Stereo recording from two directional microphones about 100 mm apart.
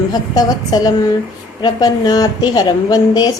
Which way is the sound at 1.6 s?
45° left (ahead or behind).